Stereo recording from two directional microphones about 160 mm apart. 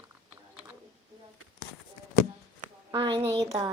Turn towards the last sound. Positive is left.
turn(degrees=-25)  # may be behind; listen again after turning